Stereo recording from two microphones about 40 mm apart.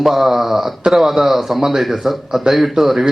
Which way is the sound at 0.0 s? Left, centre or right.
Centre.